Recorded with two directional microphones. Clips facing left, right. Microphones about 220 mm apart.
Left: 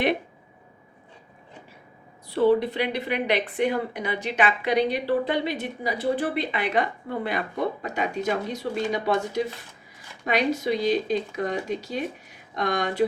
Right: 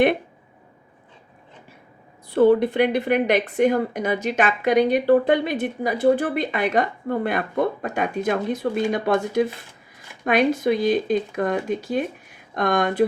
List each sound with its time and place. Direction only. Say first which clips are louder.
2.3 s a woman's voice: right 4 dB; 50° right (ahead or behind)